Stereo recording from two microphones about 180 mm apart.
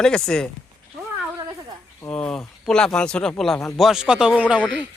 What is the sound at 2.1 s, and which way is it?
Speech, 5° left (ahead or behind).